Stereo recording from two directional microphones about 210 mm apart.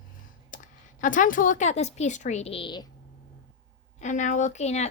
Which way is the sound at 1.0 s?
40° left (ahead or behind).